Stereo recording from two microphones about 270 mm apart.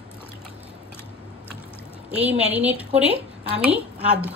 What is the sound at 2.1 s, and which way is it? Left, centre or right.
A woman's voice, centre.